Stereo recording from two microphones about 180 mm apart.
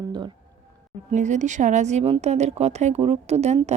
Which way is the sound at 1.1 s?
40° right (ahead or behind).